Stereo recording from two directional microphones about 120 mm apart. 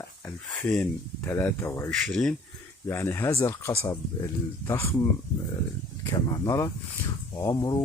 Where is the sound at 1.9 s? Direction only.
5° left (ahead or behind).